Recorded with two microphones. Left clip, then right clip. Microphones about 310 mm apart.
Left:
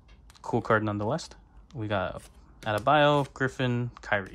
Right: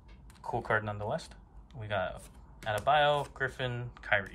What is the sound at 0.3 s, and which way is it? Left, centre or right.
Speech, centre.